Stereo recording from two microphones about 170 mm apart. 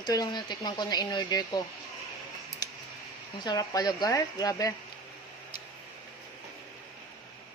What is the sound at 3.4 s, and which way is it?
Speech, 20° left (ahead or behind).